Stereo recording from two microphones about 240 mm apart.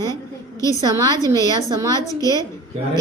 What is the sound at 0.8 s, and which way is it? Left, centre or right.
Speech, centre.